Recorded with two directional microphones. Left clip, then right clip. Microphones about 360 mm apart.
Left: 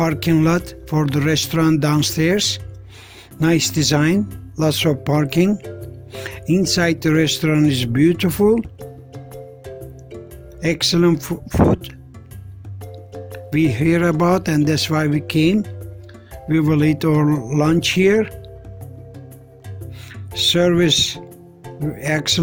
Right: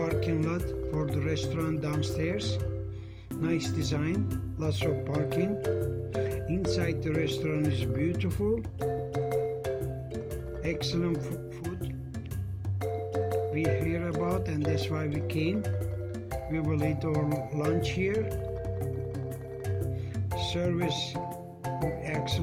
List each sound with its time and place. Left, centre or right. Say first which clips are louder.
0.0 s speech: left 12 dB; left
10.6 s speech: left 15 dB; left
13.5 s speech: left 12 dB; left
20.3 s speech: left 16 dB; left